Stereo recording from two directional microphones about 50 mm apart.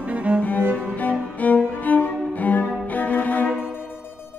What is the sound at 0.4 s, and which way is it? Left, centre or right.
Cello, left.